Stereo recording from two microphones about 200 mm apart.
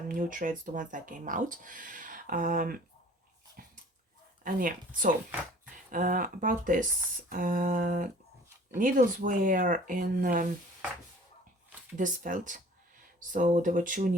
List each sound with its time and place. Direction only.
0.1 s speech: 40° right (ahead or behind)
3.6 s dog: 45° right (ahead or behind)
4.4 s a sound: 40° right (ahead or behind)
5.9 s speech: 45° right (ahead or behind)
7.3 s a sound: 45° right (ahead or behind)
8.8 s speech: 40° right (ahead or behind)
11.9 s speech: 40° right (ahead or behind)